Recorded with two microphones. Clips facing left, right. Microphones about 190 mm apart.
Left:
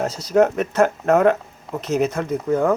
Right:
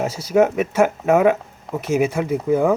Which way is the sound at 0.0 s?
5° right (ahead or behind).